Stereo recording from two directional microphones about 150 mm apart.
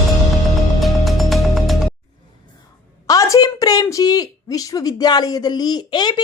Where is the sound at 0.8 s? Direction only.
Centre (ahead or behind).